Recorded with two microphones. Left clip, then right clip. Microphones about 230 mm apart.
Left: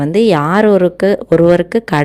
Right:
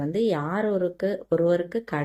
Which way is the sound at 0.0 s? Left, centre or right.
Left.